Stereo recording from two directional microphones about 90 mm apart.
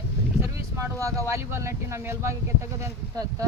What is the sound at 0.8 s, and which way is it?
Speech, 35° right (ahead or behind).